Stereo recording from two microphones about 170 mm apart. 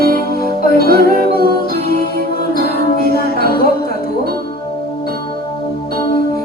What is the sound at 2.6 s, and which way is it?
Music, 60° left (ahead or behind).